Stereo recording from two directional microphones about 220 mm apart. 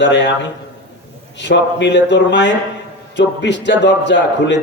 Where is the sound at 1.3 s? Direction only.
55° left (ahead or behind).